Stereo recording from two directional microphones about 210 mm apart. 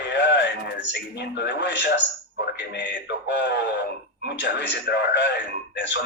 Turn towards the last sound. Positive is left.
turn(degrees=55)  # may be behind; listen again after turning